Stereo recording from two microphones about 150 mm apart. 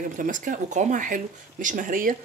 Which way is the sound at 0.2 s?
60° right (ahead or behind).